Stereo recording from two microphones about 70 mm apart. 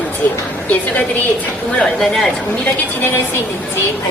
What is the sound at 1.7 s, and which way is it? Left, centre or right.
Speech, centre.